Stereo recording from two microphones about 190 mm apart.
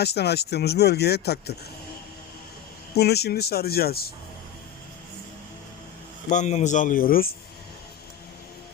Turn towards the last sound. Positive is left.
turn(degrees=50)  # may be behind; listen again after turning